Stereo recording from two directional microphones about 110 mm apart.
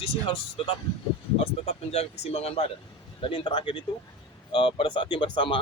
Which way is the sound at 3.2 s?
55° left (ahead or behind).